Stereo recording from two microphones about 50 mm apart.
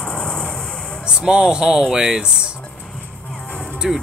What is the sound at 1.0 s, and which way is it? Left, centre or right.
Speech, centre.